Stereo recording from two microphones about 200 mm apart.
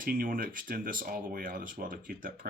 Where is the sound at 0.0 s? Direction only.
45° right (ahead or behind).